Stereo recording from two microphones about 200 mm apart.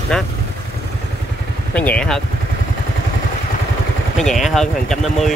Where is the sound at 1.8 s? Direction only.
5° left (ahead or behind).